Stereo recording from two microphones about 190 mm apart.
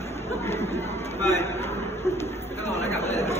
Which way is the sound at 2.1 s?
15° left (ahead or behind).